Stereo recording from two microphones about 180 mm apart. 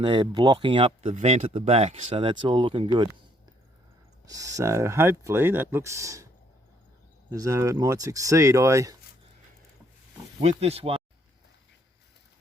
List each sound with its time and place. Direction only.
0.0 s speech: 25° right (ahead or behind)
4.3 s speech: 20° right (ahead or behind)
7.3 s speech: 20° right (ahead or behind)
10.4 s speech: 35° right (ahead or behind)